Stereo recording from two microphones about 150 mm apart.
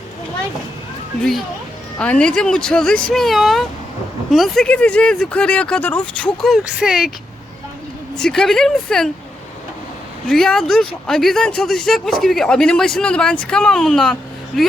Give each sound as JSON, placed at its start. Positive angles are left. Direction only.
{"t": 2.0, "sound": "speech", "side_deg": 5}
{"t": 8.1, "sound": "speech", "side_deg": 5}
{"t": 10.2, "sound": "speech", "side_deg": 5}